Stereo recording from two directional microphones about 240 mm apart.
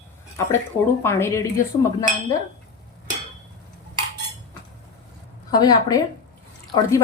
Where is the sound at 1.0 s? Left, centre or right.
Centre.